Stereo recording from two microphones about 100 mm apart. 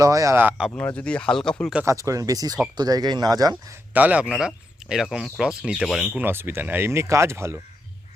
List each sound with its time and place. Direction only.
0.0 s speech: 35° right (ahead or behind)
0.8 s speech: 15° left (ahead or behind)
1.8 s speech: 30° right (ahead or behind)
3.9 s a man's voice: 15° right (ahead or behind)
6.1 s speech: 20° right (ahead or behind)